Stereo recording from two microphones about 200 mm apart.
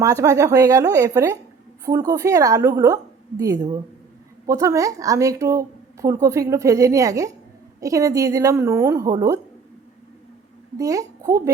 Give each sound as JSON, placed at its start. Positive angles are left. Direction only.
{"t": 0.0, "sound": "a woman's voice", "side_deg": -15}
{"t": 10.8, "sound": "a woman's voice", "side_deg": -15}